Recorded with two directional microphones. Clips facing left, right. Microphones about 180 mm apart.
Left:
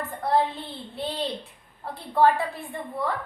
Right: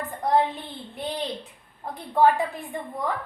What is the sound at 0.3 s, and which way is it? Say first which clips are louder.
Child singing: right 1 dB; 15° right (ahead or behind).